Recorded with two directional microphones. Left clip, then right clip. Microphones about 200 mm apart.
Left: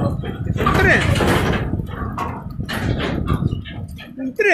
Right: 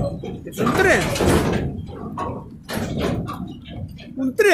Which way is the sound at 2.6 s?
60° right (ahead or behind).